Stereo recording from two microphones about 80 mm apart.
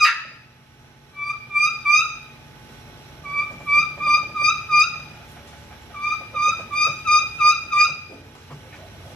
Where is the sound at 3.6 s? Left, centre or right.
Centre.